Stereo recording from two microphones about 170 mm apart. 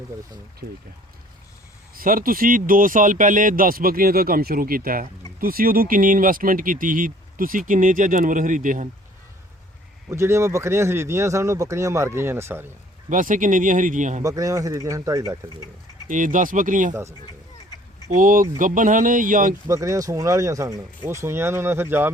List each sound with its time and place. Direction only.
2.0 s speech: 55° right (ahead or behind)
10.1 s speech: 15° right (ahead or behind)
13.1 s speech: 50° right (ahead or behind)
14.2 s speech: 20° right (ahead or behind)
16.0 s speech: 50° right (ahead or behind)
16.9 s speech: 15° right (ahead or behind)
17.2 s duck: 25° left (ahead or behind)
18.1 s speech: 55° right (ahead or behind)
19.6 s speech: 20° right (ahead or behind)